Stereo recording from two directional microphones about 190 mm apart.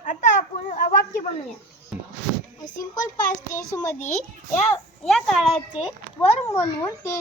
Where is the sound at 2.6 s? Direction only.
20° left (ahead or behind).